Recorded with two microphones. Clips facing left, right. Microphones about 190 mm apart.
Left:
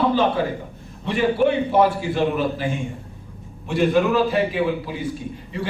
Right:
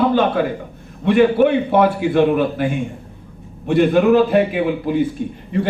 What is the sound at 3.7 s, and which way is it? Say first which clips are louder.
A man's voice: right 5 dB; 55° right (ahead or behind).